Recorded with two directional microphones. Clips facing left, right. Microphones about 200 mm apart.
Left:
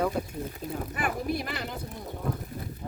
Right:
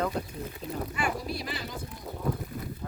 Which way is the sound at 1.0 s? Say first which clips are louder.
Left 4 dB; 55° left (ahead or behind).